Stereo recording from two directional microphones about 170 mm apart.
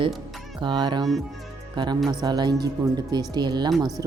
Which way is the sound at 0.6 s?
25° right (ahead or behind).